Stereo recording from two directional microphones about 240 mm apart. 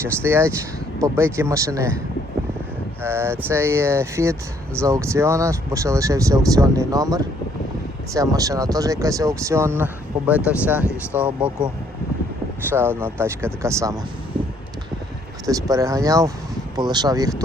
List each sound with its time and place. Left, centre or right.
0.0 s speech: centre
3.0 s speech: centre
12.7 s speech: centre
15.4 s speech: centre